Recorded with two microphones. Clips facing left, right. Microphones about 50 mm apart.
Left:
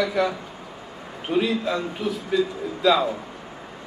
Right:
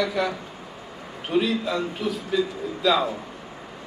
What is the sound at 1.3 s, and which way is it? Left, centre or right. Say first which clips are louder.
Speech: left 1 dB; left.